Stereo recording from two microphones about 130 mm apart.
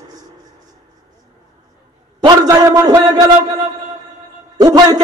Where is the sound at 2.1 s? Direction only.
30° right (ahead or behind).